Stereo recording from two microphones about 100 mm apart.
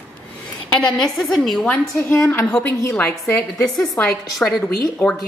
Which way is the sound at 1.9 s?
20° left (ahead or behind).